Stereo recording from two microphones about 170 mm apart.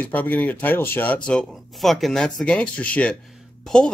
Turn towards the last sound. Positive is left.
turn(degrees=5)  # may be behind; listen again after turning